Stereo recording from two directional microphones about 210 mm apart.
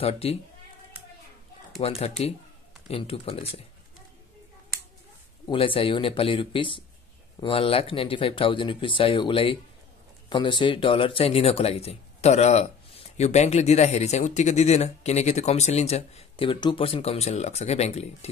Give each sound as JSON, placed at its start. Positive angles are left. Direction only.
{"t": 0.0, "sound": "speech", "side_deg": 30}
{"t": 1.8, "sound": "speech", "side_deg": 30}
{"t": 5.5, "sound": "a man's voice", "side_deg": 25}